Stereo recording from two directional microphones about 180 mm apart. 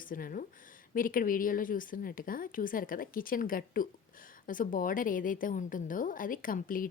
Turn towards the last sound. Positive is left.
turn(degrees=50)  # may be behind; listen again after turning